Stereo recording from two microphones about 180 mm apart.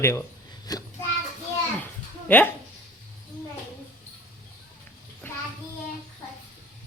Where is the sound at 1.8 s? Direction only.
10° left (ahead or behind).